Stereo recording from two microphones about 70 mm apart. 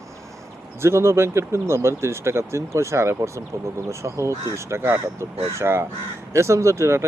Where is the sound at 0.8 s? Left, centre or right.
Right.